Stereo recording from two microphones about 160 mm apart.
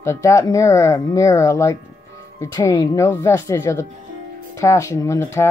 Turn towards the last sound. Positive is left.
turn(degrees=20)  # may be behind; listen again after turning